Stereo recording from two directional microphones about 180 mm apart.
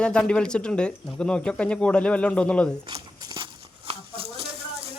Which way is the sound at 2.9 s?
30° right (ahead or behind).